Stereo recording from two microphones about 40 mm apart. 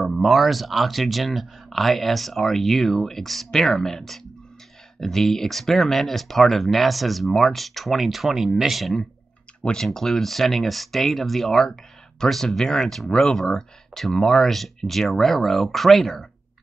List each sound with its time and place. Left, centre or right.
0.0 s speech: centre
9.6 s speech: left
9.9 s speech: centre
13.1 s speech: centre